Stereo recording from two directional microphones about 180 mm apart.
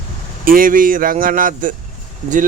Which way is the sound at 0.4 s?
50° right (ahead or behind).